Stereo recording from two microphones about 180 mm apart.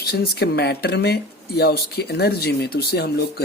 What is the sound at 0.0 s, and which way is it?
Speech, 65° left (ahead or behind).